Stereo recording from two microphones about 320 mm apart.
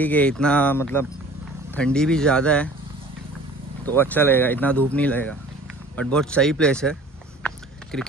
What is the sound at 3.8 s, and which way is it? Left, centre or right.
Speech, centre.